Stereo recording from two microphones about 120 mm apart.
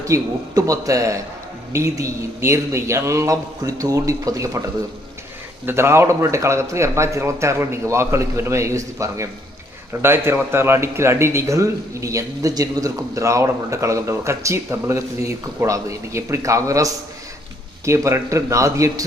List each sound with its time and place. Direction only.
0.0 s a man's voice: 30° right (ahead or behind)
5.6 s a man's voice: 20° right (ahead or behind)